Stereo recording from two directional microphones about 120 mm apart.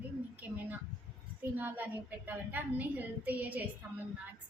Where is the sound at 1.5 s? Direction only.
15° right (ahead or behind).